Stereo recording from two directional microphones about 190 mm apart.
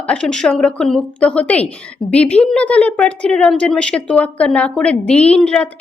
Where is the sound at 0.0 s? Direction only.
5° left (ahead or behind).